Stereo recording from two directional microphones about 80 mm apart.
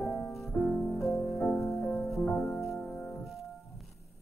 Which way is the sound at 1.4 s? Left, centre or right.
Left.